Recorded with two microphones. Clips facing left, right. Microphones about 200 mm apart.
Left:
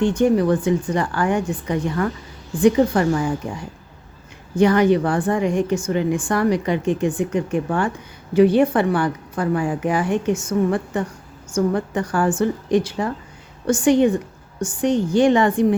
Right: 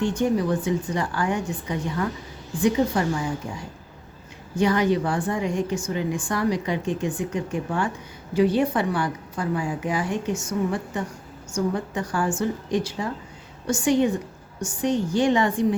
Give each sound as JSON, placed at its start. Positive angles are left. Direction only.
{"t": 0.0, "sound": "a woman's voice", "side_deg": 60}
{"t": 4.6, "sound": "a woman's voice", "side_deg": 60}